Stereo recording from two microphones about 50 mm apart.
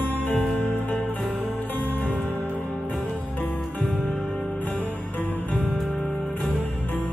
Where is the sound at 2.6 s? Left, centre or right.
Right.